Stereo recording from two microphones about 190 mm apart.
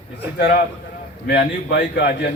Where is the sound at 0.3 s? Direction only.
55° left (ahead or behind).